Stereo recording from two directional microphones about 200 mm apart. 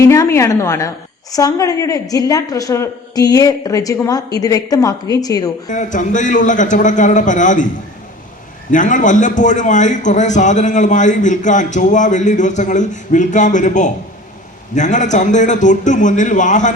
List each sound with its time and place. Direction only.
0.0 s a woman's voice: 15° left (ahead or behind)
5.6 s a man's voice: 40° left (ahead or behind)
8.7 s a man's voice: 40° left (ahead or behind)